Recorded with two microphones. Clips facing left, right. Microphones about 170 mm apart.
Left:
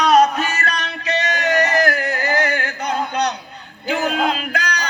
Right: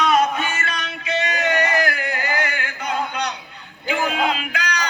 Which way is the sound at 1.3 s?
40° left (ahead or behind).